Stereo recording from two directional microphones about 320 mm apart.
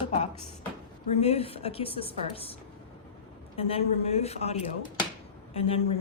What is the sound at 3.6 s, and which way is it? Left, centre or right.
A woman's voice, centre.